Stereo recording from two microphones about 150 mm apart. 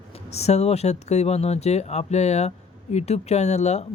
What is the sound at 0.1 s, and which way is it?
A man's voice, 45° left (ahead or behind).